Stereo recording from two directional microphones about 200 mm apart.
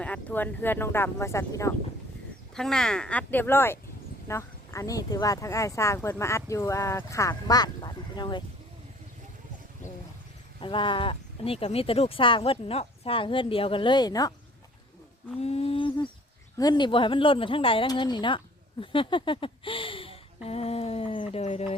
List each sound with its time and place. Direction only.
0.0 s speech: 5° left (ahead or behind)
2.6 s speech: 5° left (ahead or behind); by 8.4 s 20° left (ahead or behind)
10.6 s speech: 25° left (ahead or behind)
15.4 s a sound: 30° left (ahead or behind)
16.6 s speech: 20° left (ahead or behind)